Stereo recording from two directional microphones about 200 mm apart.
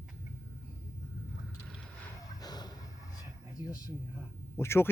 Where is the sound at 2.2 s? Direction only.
20° left (ahead or behind).